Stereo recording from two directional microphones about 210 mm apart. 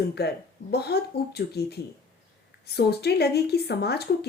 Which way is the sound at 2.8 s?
50° left (ahead or behind).